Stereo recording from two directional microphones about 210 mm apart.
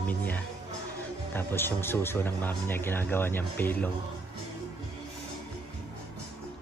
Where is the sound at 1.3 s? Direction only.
10° left (ahead or behind).